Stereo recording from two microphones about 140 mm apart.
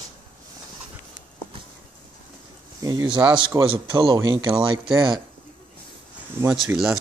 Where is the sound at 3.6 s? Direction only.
40° right (ahead or behind).